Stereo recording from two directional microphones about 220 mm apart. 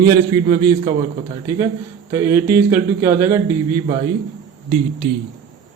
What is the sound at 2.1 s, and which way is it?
A man's voice, 10° right (ahead or behind).